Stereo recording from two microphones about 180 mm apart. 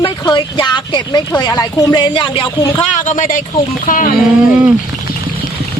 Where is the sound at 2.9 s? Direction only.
40° left (ahead or behind).